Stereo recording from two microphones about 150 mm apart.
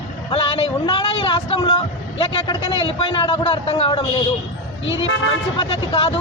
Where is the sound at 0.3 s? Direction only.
40° left (ahead or behind).